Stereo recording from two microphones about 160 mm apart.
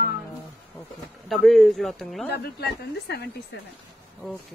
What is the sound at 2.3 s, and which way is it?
Speech, 90° left.